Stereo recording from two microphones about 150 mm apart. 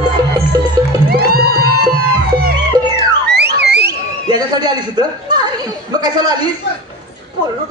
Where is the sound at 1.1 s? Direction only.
85° right.